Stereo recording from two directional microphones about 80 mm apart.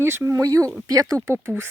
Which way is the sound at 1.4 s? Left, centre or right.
Right.